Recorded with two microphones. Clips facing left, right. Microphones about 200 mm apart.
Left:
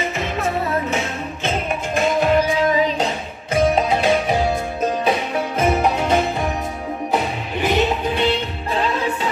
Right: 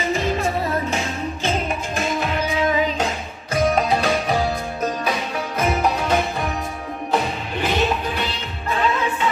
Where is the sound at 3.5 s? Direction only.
20° left (ahead or behind).